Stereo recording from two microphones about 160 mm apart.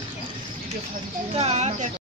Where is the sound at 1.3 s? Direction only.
40° right (ahead or behind).